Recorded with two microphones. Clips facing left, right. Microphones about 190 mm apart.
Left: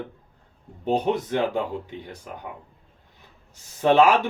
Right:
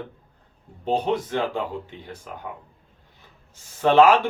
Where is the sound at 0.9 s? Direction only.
20° left (ahead or behind).